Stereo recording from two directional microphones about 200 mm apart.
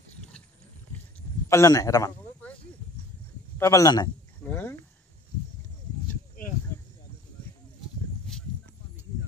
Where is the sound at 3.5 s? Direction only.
15° left (ahead or behind).